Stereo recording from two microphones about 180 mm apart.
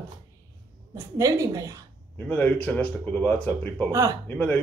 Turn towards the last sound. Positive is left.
turn(degrees=10)  # may be behind; listen again after turning